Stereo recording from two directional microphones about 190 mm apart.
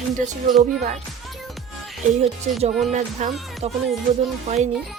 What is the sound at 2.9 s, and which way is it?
Speech, 40° right (ahead or behind).